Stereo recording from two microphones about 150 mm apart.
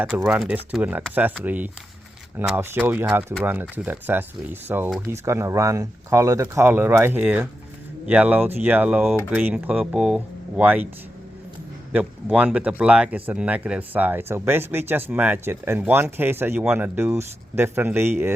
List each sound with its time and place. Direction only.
0.3 s speech: 10° right (ahead or behind)
11.9 s speech: 10° right (ahead or behind)